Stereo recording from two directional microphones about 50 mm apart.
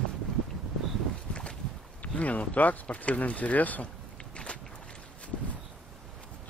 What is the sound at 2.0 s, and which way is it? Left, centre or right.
Speech, left.